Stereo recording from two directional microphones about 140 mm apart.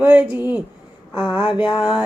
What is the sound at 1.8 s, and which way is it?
Mantra, 10° right (ahead or behind).